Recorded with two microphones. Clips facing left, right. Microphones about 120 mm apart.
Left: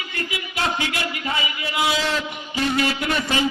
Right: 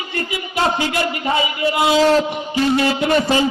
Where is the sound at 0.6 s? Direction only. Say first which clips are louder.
Right 6 dB; 30° right (ahead or behind).